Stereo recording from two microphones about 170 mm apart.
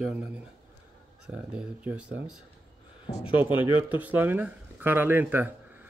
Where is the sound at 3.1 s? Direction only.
35° left (ahead or behind).